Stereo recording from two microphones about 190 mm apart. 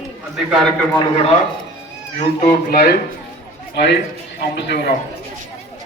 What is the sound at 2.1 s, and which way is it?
A man's voice, 45° left (ahead or behind).